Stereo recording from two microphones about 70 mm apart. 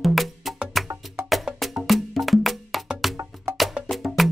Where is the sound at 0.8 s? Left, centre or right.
Right.